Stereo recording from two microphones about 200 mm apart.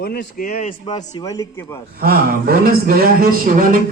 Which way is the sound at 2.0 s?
50° right (ahead or behind).